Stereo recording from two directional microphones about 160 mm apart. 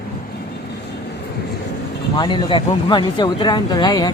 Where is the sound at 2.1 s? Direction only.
25° left (ahead or behind).